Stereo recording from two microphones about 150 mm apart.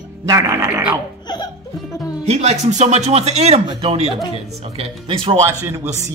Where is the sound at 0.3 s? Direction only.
20° right (ahead or behind).